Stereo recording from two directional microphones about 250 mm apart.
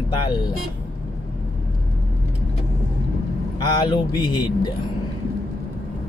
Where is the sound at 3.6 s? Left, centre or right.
Centre.